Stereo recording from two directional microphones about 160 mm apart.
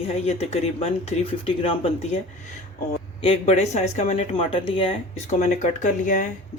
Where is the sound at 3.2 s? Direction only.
40° left (ahead or behind).